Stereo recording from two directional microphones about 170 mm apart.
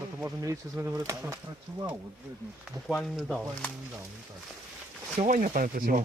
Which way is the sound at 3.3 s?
10° left (ahead or behind).